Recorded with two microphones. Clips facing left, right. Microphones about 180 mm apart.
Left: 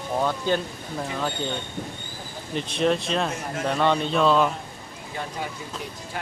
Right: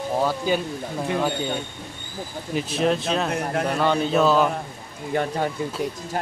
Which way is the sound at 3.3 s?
60° right (ahead or behind).